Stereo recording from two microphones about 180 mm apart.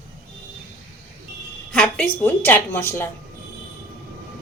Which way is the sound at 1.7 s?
5° left (ahead or behind).